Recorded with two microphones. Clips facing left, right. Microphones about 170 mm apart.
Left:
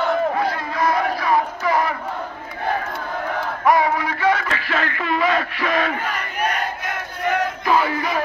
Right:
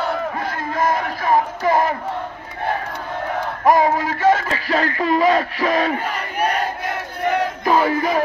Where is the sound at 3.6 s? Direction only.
45° right (ahead or behind).